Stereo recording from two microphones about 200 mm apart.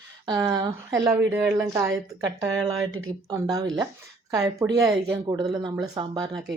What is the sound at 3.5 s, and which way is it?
Speech, 20° right (ahead or behind).